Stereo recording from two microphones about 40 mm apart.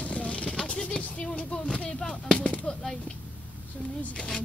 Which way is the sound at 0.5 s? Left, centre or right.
Left.